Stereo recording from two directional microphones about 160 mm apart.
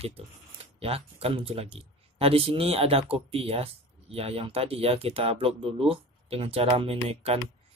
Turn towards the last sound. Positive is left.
turn(degrees=-40)  # may be behind; listen again after turning